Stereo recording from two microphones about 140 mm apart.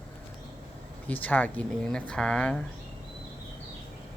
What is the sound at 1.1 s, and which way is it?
Speech, 10° left (ahead or behind).